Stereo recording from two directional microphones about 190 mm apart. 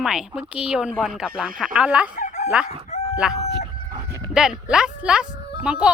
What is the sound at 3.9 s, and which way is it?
Chicken, 20° right (ahead or behind).